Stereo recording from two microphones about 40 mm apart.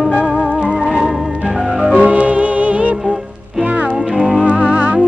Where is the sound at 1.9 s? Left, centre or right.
Right.